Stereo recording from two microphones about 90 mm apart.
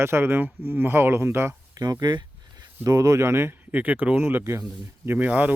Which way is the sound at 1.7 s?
45° right (ahead or behind).